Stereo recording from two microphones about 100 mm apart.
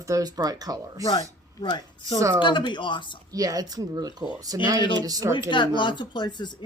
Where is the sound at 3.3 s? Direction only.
35° right (ahead or behind).